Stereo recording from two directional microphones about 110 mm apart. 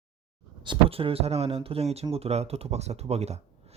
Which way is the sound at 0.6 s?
50° right (ahead or behind).